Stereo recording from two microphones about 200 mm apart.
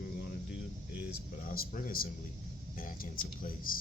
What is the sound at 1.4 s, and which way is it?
Speech, 40° left (ahead or behind).